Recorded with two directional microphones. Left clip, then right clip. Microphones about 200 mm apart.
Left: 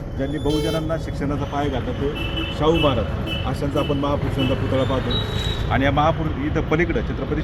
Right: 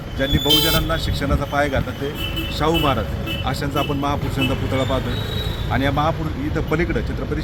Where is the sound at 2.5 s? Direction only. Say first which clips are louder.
Even; 25° right (ahead or behind).